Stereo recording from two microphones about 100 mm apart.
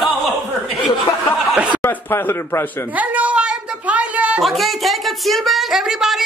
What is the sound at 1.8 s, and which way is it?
Speech, 25° left (ahead or behind).